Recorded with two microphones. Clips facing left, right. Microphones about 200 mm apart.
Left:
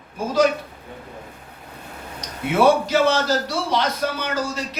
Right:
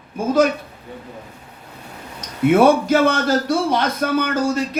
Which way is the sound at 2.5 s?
50° right (ahead or behind).